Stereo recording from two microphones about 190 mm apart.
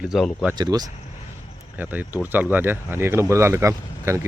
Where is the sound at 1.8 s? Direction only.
10° right (ahead or behind).